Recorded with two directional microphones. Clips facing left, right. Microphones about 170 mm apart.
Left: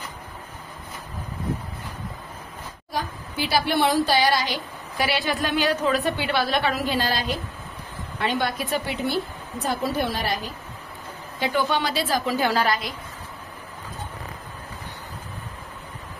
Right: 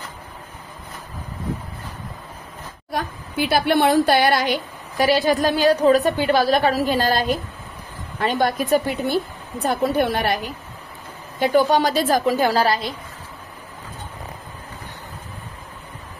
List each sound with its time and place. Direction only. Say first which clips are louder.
2.9 s a woman's voice: right 3 dB; 55° right (ahead or behind)
11.3 s a woman's voice: right 7 dB; 45° right (ahead or behind)